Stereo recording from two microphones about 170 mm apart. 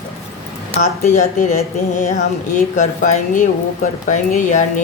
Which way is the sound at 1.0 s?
45° left (ahead or behind).